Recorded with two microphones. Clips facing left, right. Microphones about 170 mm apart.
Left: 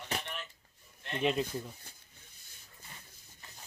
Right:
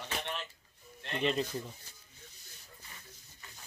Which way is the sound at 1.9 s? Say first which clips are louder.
Left 3 dB; 55° left (ahead or behind).